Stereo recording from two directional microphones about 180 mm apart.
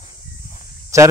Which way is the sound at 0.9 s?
15° right (ahead or behind).